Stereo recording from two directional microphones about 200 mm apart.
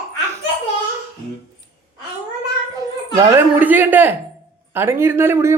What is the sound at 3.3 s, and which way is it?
Speech, 10° right (ahead or behind).